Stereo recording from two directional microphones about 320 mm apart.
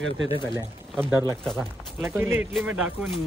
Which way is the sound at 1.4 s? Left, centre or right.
Centre.